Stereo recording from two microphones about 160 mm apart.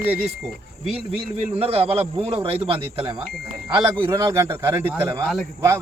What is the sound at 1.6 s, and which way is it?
Speech, 35° right (ahead or behind).